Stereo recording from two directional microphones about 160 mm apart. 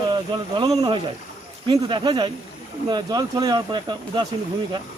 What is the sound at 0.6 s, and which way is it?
Speech, 25° right (ahead or behind).